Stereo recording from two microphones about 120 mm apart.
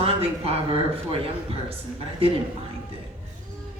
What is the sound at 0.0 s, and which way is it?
A man's voice, 55° right (ahead or behind).